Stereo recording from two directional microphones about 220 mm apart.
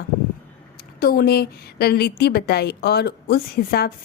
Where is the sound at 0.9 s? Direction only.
45° left (ahead or behind).